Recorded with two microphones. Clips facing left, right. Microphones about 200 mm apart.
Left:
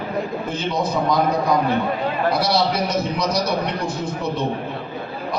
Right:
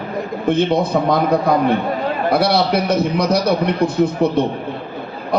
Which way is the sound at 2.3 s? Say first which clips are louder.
Right 4 dB; 60° right (ahead or behind).